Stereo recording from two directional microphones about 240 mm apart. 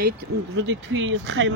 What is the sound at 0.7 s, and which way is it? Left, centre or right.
Speech, right.